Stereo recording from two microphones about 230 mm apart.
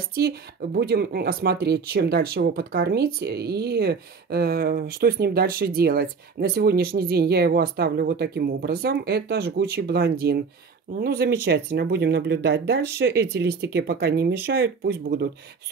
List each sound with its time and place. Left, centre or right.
0.1 s speech: right